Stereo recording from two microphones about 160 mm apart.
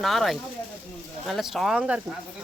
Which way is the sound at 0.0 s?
Centre (ahead or behind).